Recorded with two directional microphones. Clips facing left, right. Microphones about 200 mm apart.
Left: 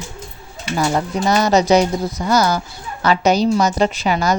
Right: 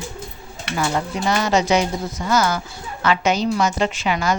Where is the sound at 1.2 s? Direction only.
40° left (ahead or behind).